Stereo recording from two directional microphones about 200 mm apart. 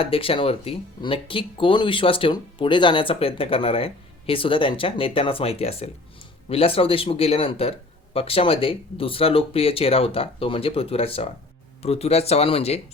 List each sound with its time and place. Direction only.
0.0 s speech: 30° left (ahead or behind)